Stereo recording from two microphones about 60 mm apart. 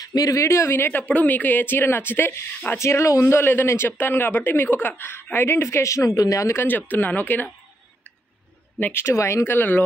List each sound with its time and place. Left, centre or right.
0.0 s speech: left
0.4 s speech: left
0.7 s speech: left
2.8 s speech: left
6.5 s speech: left
8.9 s speech: left
9.5 s speech: left